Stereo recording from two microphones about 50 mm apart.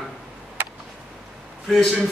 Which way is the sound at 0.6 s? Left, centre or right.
Right.